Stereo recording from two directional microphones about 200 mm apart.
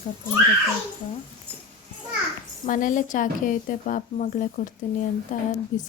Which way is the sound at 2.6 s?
40° left (ahead or behind).